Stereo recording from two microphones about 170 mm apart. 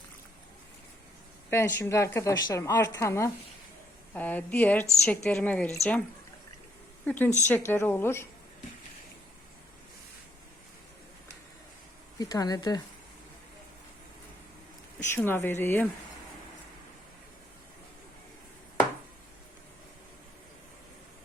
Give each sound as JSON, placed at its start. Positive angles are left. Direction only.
{"t": 1.5, "sound": "a woman's voice", "side_deg": 15}
{"t": 7.0, "sound": "a woman's voice", "side_deg": 10}
{"t": 12.2, "sound": "speech", "side_deg": 20}
{"t": 15.1, "sound": "a woman's voice", "side_deg": 15}